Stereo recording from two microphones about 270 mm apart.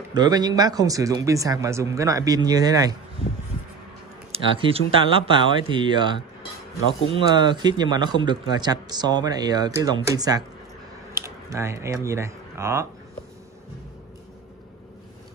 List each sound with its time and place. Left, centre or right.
0.1 s speech: centre
4.3 s speech: right